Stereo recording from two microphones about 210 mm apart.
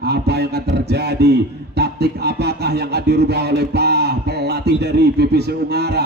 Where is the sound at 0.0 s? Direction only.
50° right (ahead or behind).